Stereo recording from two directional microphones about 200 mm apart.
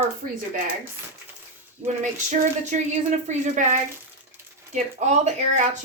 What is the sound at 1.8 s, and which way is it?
Speech, 35° right (ahead or behind).